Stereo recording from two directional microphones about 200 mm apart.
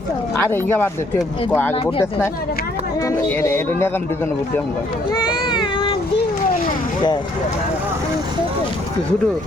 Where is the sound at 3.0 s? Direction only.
10° left (ahead or behind).